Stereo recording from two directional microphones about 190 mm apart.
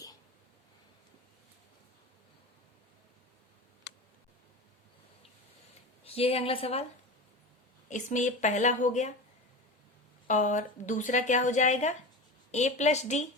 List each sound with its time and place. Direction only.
6.1 s speech: 30° left (ahead or behind)
7.9 s speech: 40° left (ahead or behind)
10.2 s speech: 40° left (ahead or behind)